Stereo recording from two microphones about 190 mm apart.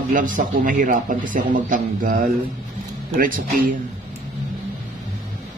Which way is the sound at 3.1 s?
45° right (ahead or behind).